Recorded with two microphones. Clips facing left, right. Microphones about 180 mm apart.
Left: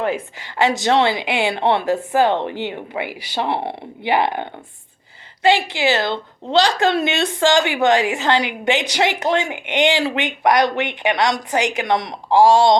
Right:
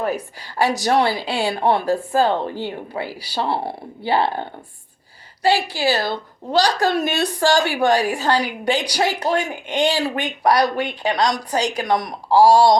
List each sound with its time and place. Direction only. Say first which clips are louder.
0.9 s a woman's voice: left 1 dB; 20° left (ahead or behind)
5.5 s a woman's voice: left 2 dB; 20° left (ahead or behind)